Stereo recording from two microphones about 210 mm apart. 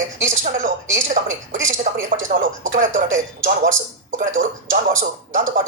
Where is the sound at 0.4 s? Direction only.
40° right (ahead or behind).